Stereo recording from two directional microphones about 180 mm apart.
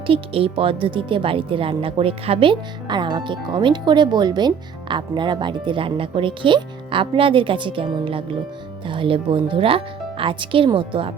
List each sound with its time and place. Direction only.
0.1 s speech: 30° right (ahead or behind)